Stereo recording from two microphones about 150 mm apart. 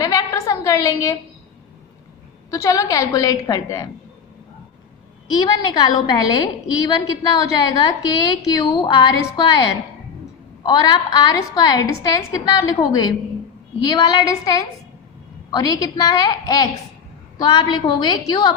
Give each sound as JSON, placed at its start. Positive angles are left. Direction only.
{"t": 0.0, "sound": "a sound", "side_deg": 25}
{"t": 2.5, "sound": "a woman's voice", "side_deg": 25}
{"t": 5.4, "sound": "a woman's voice", "side_deg": 30}